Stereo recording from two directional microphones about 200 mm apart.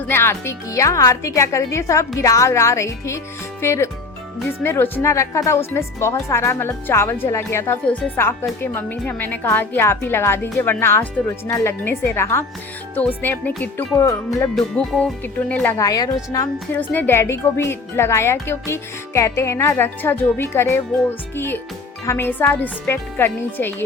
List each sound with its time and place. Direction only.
0.1 s speech: 10° left (ahead or behind)
15.8 s speech: 20° left (ahead or behind)